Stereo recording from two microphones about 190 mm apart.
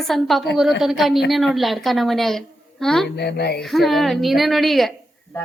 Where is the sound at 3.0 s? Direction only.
60° left (ahead or behind).